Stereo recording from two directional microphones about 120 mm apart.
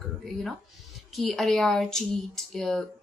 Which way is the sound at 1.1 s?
5° left (ahead or behind).